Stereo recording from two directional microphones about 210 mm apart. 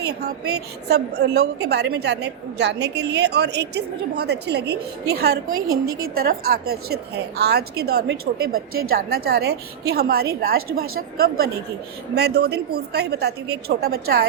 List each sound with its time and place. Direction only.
0.0 s a woman's voice: 50° right (ahead or behind)
5.5 s a woman's voice: 15° right (ahead or behind)
6.1 s a woman's voice: 45° right (ahead or behind)